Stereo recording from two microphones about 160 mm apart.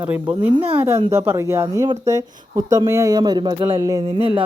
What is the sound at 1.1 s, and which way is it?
Speech, 15° right (ahead or behind).